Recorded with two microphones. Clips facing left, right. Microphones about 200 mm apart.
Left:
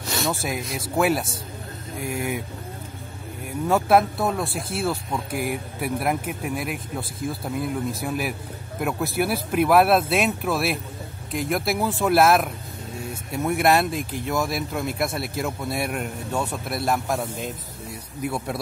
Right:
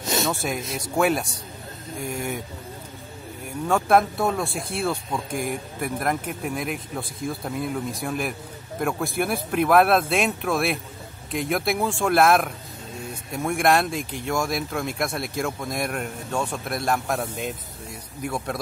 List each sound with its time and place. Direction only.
0.0 s a sound: 20° right (ahead or behind)
0.3 s speech: centre (ahead or behind)
3.6 s speech: 5° left (ahead or behind)